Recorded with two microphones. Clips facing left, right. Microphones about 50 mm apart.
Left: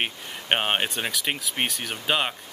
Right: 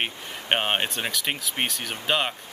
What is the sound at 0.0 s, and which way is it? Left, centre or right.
Speech, centre.